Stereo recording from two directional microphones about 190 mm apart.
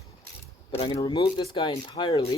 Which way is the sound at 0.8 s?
25° left (ahead or behind).